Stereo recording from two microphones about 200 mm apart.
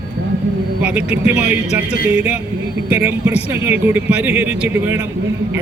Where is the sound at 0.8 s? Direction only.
5° right (ahead or behind).